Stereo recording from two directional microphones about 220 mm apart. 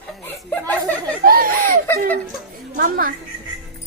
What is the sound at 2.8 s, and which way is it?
Speech, 40° right (ahead or behind).